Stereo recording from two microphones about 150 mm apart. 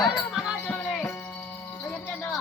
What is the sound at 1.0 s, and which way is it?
Music, 15° left (ahead or behind).